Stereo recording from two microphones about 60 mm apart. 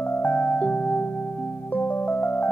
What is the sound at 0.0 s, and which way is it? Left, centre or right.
Music, left.